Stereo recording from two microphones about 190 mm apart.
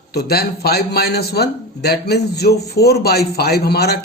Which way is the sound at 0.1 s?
55° left (ahead or behind).